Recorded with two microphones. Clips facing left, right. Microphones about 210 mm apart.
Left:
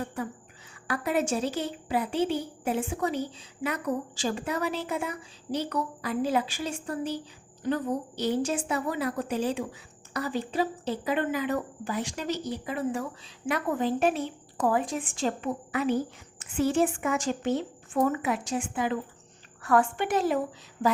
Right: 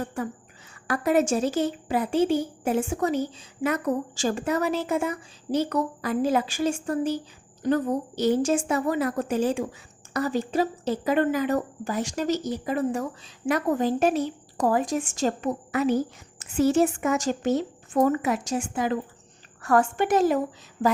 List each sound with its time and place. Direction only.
0.2 s speech: 45° right (ahead or behind)